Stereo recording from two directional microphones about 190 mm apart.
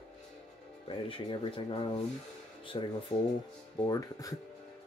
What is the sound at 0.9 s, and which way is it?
Speech, 25° left (ahead or behind).